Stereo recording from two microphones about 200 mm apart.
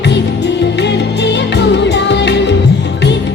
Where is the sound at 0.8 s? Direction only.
60° left (ahead or behind).